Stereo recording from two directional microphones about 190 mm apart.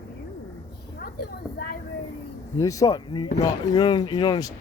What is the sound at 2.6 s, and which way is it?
Speech, 15° left (ahead or behind).